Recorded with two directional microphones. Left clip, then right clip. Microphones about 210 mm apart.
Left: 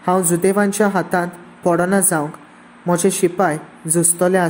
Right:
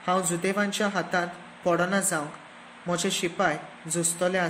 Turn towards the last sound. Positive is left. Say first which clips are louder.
# left 10 dB
turn(degrees=20)  # may be behind; listen again after turning